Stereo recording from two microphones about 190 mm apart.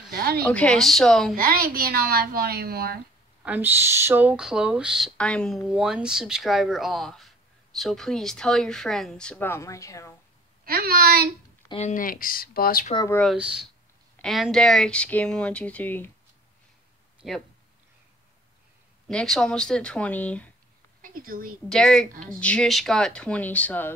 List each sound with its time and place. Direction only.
0.1 s a sound: 55° right (ahead or behind)
0.4 s speech: 5° left (ahead or behind)
1.3 s a woman's voice: 50° right (ahead or behind)
3.4 s speech: 10° right (ahead or behind); by 10.1 s 15° left (ahead or behind)
10.6 s a woman's voice: 50° right (ahead or behind)
11.7 s speech: 40° left (ahead or behind)
13.1 s speech: centre (ahead or behind)
17.2 s speech: centre (ahead or behind)
19.0 s speech: 5° left (ahead or behind)
21.0 s a woman's voice: 50° right (ahead or behind)
21.6 s speech: 5° left (ahead or behind)